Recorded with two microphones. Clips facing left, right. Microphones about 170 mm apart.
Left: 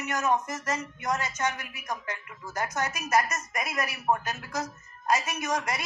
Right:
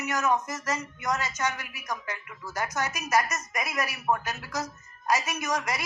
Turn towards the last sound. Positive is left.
turn(degrees=35)  # may be behind; listen again after turning